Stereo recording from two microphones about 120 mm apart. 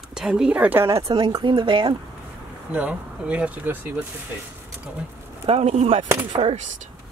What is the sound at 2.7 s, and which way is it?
Speech, 10° right (ahead or behind).